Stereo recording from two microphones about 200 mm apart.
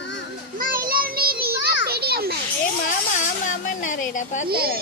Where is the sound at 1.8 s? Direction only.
50° right (ahead or behind).